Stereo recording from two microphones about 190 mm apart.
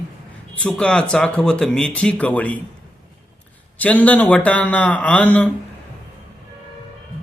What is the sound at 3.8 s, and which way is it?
Speech, 10° left (ahead or behind).